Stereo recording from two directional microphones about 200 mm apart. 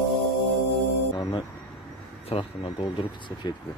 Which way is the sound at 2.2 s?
25° left (ahead or behind).